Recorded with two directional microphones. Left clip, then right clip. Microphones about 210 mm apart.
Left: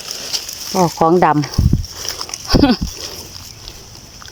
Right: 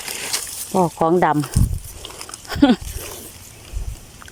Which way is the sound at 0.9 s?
5° left (ahead or behind).